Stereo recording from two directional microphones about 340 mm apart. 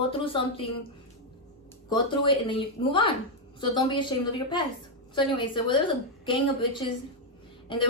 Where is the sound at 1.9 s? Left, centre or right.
Centre.